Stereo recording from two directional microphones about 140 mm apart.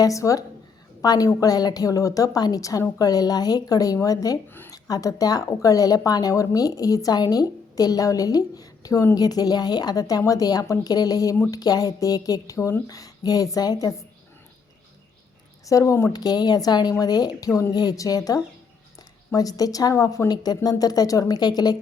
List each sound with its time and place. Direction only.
0.0 s a woman's voice: 25° left (ahead or behind)
4.5 s a woman's voice: 15° left (ahead or behind)
15.6 s a woman's voice: 20° left (ahead or behind)
16.1 s a woman's voice: 30° left (ahead or behind)